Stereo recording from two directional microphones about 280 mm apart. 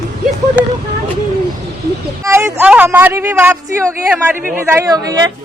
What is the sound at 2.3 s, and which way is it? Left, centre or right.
A woman's voice, centre.